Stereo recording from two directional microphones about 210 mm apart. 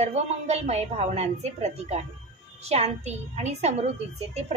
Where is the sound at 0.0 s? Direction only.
30° right (ahead or behind).